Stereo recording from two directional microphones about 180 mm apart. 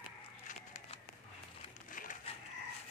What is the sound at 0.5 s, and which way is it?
Crumpling, 35° left (ahead or behind).